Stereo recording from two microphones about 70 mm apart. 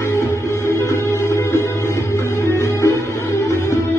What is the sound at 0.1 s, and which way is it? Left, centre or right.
Music, left.